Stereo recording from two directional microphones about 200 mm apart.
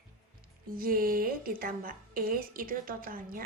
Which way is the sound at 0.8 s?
45° right (ahead or behind).